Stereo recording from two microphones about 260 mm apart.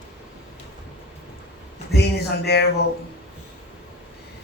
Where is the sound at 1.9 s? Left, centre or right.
Left.